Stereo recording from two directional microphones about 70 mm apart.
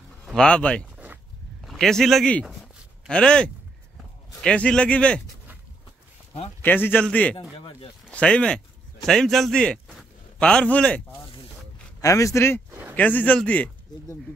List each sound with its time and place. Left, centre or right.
0.3 s a man's voice: centre
0.9 s a sound: right
1.6 s a man's voice: centre
6.6 s a man's voice: left
12.0 s a man's voice: left
12.9 s a man's voice: left